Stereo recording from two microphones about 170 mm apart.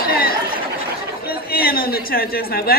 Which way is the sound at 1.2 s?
60° left (ahead or behind).